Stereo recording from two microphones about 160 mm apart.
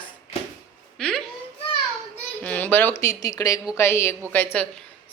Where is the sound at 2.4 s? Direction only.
10° left (ahead or behind).